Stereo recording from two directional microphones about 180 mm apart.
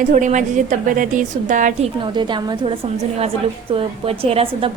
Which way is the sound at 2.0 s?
25° right (ahead or behind).